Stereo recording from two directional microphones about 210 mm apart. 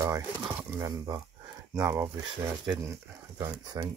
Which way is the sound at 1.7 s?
10° right (ahead or behind).